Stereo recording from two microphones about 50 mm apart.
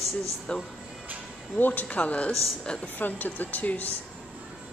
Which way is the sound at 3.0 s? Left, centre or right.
Left.